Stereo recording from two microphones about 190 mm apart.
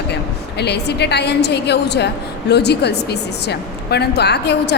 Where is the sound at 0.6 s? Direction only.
60° left (ahead or behind).